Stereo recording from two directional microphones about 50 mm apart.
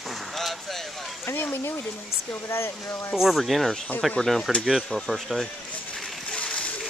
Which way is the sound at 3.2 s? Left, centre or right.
Centre.